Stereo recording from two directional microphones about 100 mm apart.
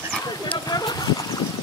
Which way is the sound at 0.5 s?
45° left (ahead or behind).